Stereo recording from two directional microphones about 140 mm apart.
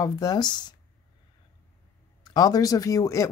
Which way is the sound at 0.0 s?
25° left (ahead or behind).